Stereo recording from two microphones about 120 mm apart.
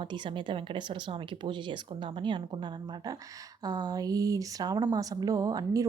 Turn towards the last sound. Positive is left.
turn(degrees=-30)  # may be behind; listen again after turning